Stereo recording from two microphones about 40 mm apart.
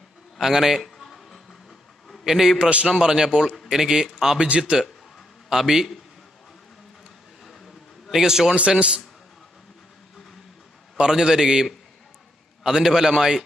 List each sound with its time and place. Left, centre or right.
0.4 s a sound: centre
2.2 s a man's voice: centre
2.6 s a man's voice: right
2.9 s a man's voice: centre
7.4 s a sound: centre
8.1 s a man's voice: centre
8.5 s a man's voice: right
11.0 s a man's voice: centre
12.6 s a man's voice: centre